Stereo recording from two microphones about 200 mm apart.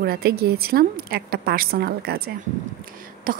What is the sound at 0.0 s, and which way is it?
A woman's voice, 50° right (ahead or behind).